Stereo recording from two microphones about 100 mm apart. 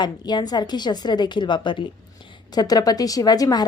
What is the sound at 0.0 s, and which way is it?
A woman's voice, 45° left (ahead or behind).